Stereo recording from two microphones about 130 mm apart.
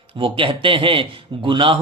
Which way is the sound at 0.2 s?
40° right (ahead or behind).